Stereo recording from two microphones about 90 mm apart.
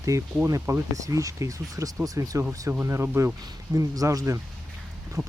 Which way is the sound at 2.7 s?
25° right (ahead or behind).